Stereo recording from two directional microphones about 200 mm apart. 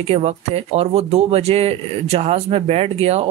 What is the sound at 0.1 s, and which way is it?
Speech, 25° right (ahead or behind).